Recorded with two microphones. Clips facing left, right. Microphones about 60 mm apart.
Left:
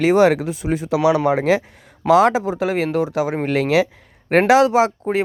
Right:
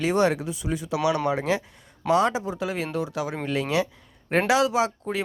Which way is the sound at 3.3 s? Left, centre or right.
Left.